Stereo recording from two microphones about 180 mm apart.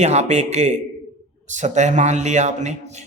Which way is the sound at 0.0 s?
40° right (ahead or behind).